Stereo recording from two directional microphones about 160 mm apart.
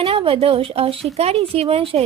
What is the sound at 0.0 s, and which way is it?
A woman's voice, 35° right (ahead or behind).